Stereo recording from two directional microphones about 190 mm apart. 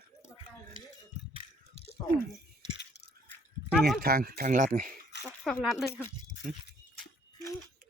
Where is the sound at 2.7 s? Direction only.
60° left (ahead or behind).